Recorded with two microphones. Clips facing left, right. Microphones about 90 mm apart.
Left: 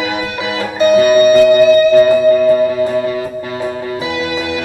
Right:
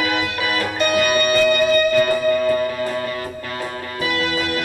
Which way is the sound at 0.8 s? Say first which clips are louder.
Left 11 dB; 20° left (ahead or behind).